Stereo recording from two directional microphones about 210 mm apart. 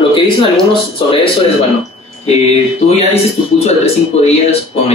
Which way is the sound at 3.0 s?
30° left (ahead or behind).